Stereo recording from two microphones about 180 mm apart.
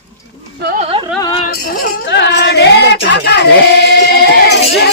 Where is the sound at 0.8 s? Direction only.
30° right (ahead or behind).